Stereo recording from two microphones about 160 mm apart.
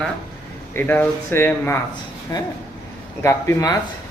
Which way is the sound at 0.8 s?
10° left (ahead or behind).